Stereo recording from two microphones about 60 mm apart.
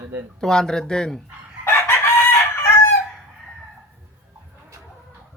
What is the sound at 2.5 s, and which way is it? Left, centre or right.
Crowing, left.